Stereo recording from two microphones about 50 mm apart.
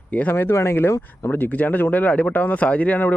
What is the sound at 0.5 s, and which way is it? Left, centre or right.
Speech, left.